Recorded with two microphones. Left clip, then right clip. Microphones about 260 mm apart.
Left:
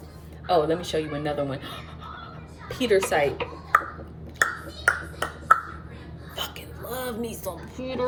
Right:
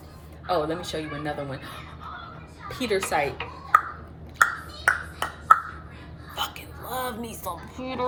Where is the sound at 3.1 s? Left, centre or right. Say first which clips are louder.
Left 2 dB; centre.